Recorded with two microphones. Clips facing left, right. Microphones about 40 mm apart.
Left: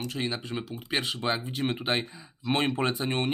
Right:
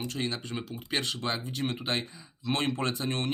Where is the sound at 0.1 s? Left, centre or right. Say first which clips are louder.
Left 2 dB; centre.